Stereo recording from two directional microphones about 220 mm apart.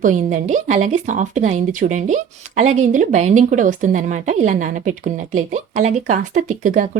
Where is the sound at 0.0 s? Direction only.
35° right (ahead or behind).